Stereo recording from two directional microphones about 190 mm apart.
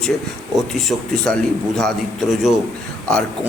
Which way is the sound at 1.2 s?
5° left (ahead or behind).